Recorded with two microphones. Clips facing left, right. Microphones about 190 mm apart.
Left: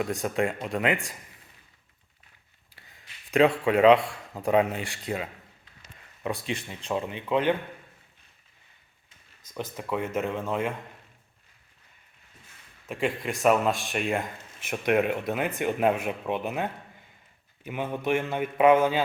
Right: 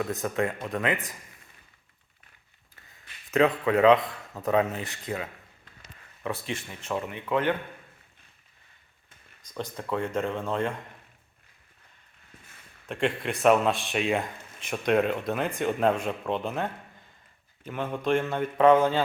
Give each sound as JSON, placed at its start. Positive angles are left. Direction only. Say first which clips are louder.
{"t": 0.0, "sound": "speech", "louder": "left 1 dB", "side_deg": 15}
{"t": 3.3, "sound": "speech", "louder": "left 1 dB", "side_deg": 15}
{"t": 9.6, "sound": "speech", "louder": "even", "side_deg": 5}
{"t": 12.9, "sound": "speech", "louder": "right 1 dB", "side_deg": 0}